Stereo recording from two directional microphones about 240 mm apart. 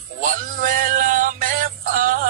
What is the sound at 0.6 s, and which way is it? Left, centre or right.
Music, right.